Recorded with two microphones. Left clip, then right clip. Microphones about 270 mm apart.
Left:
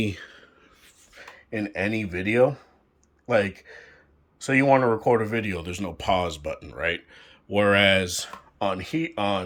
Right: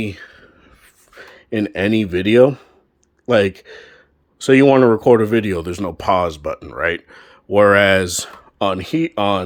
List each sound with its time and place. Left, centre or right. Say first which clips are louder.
0.0 s whispering: right 3 dB; centre
1.1 s speech: right 9 dB; right